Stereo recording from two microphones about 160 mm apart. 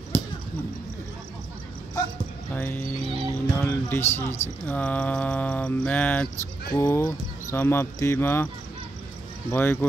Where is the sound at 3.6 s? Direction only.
10° left (ahead or behind).